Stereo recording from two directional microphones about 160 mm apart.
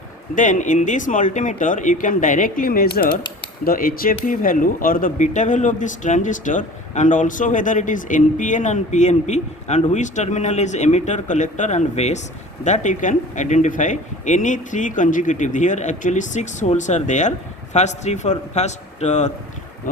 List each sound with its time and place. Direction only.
0.3 s speech: 50° left (ahead or behind)